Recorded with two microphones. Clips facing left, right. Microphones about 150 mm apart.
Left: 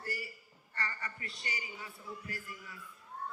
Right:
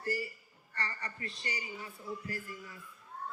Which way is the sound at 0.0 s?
25° right (ahead or behind).